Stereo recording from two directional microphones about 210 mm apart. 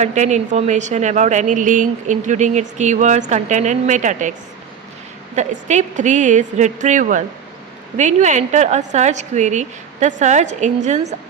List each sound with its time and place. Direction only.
0.0 s a woman's voice: 35° right (ahead or behind)